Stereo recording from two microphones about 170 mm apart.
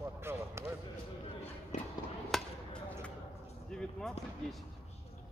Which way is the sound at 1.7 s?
45° left (ahead or behind).